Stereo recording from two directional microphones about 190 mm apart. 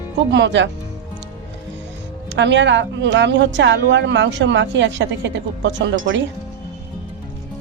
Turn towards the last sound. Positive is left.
turn(degrees=-75)  # may be behind; listen again after turning